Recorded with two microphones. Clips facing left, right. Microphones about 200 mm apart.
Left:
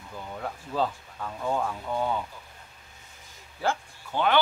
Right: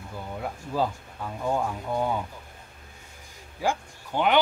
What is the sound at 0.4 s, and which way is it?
Speech, 10° right (ahead or behind).